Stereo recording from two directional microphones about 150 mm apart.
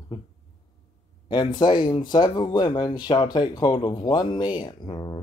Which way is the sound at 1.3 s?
30° left (ahead or behind).